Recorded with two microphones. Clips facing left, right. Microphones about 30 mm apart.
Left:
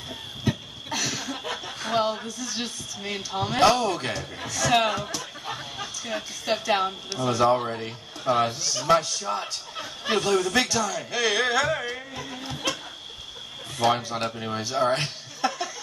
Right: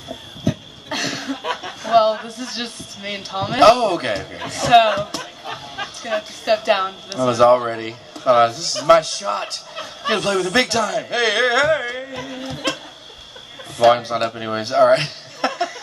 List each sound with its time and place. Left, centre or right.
0.8 s a sound: right
1.4 s chuckle: right
2.0 s a man's voice: right
2.2 s a man's voice: right
3.0 s speech: right
7.2 s speech: right
7.5 s speech: right
12.2 s speech: right
12.4 s a man's voice: right
13.8 s a man's voice: right
14.6 s a sound: right